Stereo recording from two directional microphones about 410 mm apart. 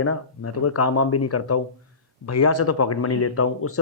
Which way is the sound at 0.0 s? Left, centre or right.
Left.